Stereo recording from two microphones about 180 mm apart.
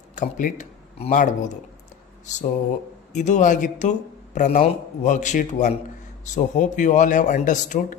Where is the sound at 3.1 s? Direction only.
40° left (ahead or behind).